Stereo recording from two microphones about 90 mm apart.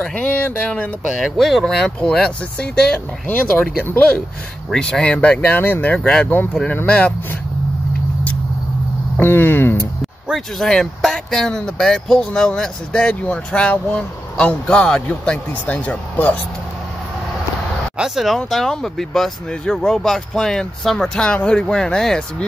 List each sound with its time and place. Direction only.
0.0 s speech: 20° left (ahead or behind)
1.2 s speech: centre (ahead or behind)
3.8 s speech: 25° left (ahead or behind)
4.6 s speech: 5° left (ahead or behind)
9.2 s speech: 25° left (ahead or behind)
10.3 s speech: 5° left (ahead or behind)
17.9 s speech: 5° right (ahead or behind)